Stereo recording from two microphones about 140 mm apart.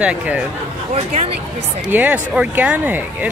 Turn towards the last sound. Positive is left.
turn(degrees=-10)  # may be behind; listen again after turning